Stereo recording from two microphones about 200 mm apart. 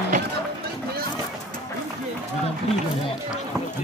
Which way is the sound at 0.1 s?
40° right (ahead or behind).